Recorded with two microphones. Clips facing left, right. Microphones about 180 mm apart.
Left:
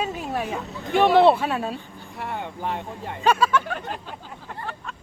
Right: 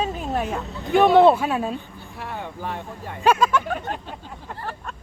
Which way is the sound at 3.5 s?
5° right (ahead or behind).